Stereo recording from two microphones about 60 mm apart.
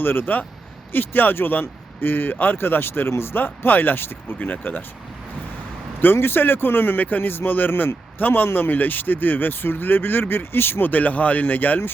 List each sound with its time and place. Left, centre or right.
0.0 s speech: left
6.0 s speech: left